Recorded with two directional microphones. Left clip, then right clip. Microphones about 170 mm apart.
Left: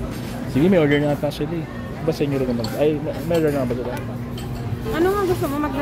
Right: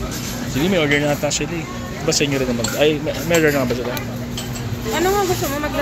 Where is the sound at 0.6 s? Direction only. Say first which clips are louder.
Left 1 dB; 35° left (ahead or behind).